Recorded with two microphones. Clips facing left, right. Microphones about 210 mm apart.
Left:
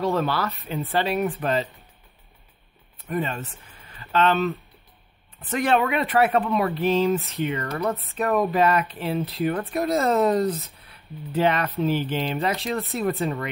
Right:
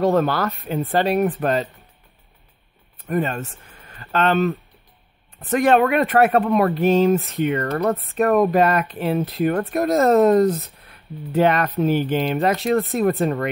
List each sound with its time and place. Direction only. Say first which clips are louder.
0.0 s speech: right 5 dB; 45° right (ahead or behind)
3.0 s speech: right 5 dB; 45° right (ahead or behind)